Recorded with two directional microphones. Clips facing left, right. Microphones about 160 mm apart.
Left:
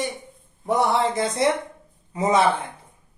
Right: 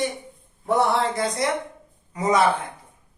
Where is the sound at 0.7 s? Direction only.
20° left (ahead or behind).